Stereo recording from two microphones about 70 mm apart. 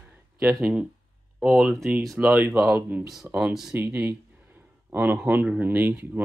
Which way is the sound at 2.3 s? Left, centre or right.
Right.